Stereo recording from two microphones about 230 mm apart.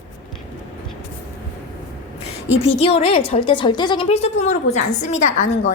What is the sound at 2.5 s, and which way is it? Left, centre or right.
A woman's voice, left.